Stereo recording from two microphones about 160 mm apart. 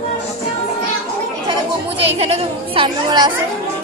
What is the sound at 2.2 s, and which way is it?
A woman's voice, 35° right (ahead or behind).